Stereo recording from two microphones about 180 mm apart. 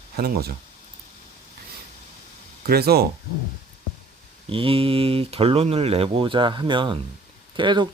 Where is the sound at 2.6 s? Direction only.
60° right (ahead or behind).